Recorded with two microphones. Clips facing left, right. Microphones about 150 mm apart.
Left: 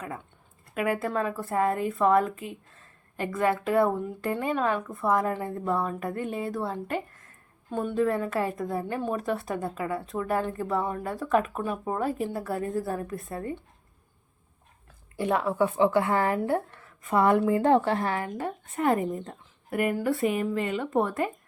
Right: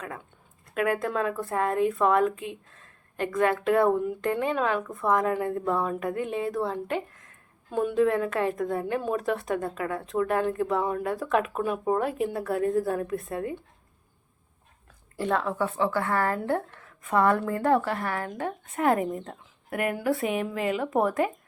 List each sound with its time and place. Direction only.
0.7 s a woman's voice: 5° left (ahead or behind)
15.2 s speech: 10° left (ahead or behind)
16.5 s a woman's voice: 5° left (ahead or behind)
17.2 s a woman's voice: 15° left (ahead or behind)
18.3 s a woman's voice: centre (ahead or behind)